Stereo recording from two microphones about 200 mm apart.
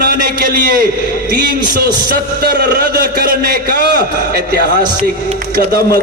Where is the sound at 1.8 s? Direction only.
50° right (ahead or behind).